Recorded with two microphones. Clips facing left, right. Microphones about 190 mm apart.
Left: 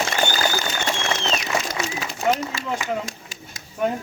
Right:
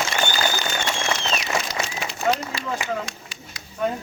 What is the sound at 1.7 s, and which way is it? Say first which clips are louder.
Run: left 1 dB; 45° left (ahead or behind).